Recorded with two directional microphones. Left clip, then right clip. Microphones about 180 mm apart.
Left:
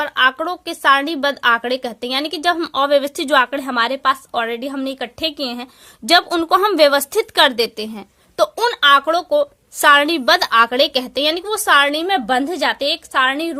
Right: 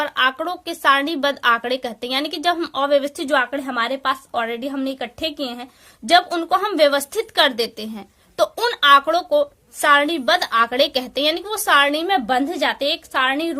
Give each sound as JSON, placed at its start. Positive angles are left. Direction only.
{"t": 0.0, "sound": "speech", "side_deg": 30}